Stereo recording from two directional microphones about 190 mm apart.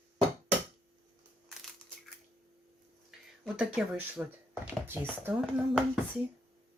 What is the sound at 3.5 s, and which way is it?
Speech, 5° right (ahead or behind).